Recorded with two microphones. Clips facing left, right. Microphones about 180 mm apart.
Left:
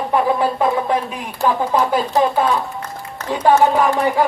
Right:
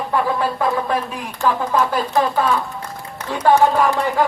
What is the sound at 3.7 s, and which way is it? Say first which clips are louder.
Speech: left 2 dB; 15° left (ahead or behind).